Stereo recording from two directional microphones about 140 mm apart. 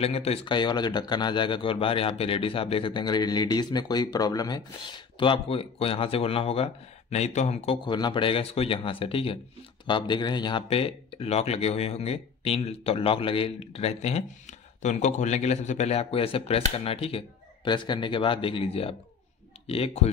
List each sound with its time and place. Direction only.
0.0 s speech: 45° left (ahead or behind)